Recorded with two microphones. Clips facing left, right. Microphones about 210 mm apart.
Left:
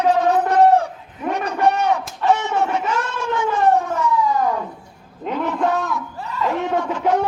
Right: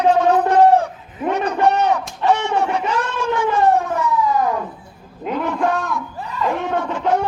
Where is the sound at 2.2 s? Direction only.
20° right (ahead or behind).